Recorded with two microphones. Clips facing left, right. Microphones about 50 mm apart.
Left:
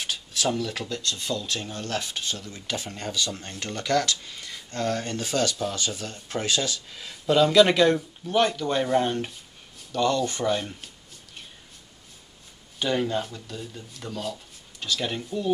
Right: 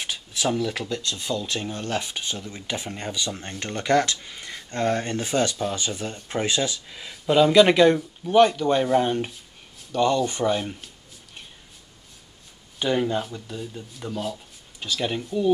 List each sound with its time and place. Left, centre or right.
0.0 s speech: centre
12.7 s speech: centre